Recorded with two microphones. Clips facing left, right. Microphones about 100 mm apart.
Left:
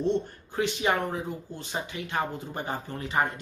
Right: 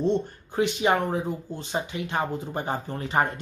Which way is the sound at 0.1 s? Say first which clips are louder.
Right 2 dB; 20° right (ahead or behind).